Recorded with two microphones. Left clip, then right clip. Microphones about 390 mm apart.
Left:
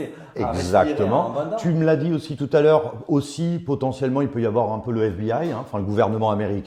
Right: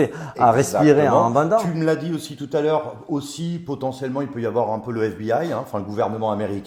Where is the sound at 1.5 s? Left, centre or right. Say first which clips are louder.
Right 1 dB; left.